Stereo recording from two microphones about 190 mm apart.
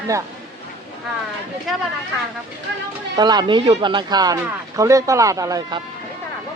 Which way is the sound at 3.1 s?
20° right (ahead or behind).